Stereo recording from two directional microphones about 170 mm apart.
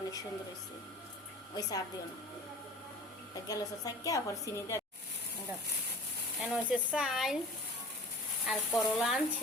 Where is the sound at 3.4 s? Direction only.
20° left (ahead or behind).